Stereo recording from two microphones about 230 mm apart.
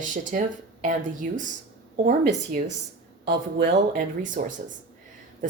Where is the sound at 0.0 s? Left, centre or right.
Right.